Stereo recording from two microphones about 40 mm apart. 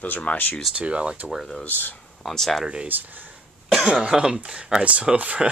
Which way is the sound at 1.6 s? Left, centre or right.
Left.